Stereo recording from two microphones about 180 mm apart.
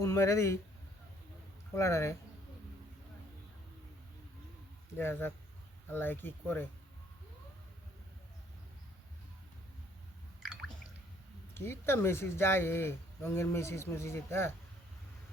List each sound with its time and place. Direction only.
0.0 s speech: 15° left (ahead or behind)
1.7 s speech: 15° left (ahead or behind)
4.9 s speech: 15° left (ahead or behind)
11.5 s speech: 15° left (ahead or behind)